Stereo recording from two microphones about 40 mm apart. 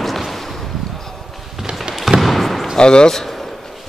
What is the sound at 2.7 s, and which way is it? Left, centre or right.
Speech, left.